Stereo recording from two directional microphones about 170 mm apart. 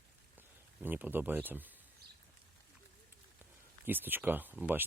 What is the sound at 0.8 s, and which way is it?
Speech, 10° right (ahead or behind).